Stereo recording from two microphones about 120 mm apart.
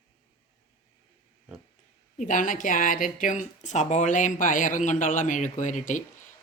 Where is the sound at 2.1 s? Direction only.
90° left.